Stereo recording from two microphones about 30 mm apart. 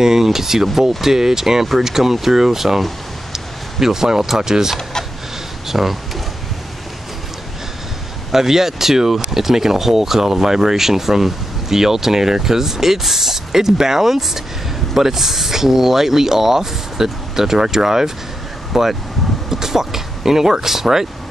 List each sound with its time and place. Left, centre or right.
0.0 s speech: centre
3.3 s a sound: centre
4.4 s speech: centre
8.3 s speech: centre
19.5 s speech: centre